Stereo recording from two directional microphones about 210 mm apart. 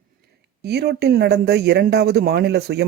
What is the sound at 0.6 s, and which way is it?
Speech, 50° right (ahead or behind).